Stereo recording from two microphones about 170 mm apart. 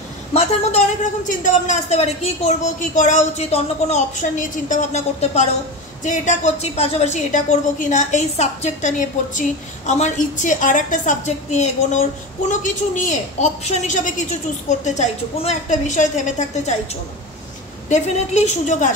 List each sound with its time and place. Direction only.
0.3 s a woman's voice: 40° left (ahead or behind)
17.8 s a woman's voice: 40° left (ahead or behind)